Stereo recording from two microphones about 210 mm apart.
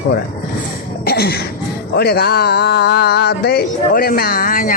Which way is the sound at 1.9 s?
50° left (ahead or behind).